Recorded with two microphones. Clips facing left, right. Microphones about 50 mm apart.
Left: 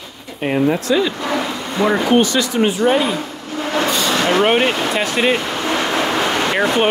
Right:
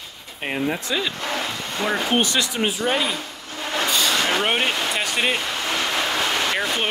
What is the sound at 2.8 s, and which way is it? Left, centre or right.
Speech, left.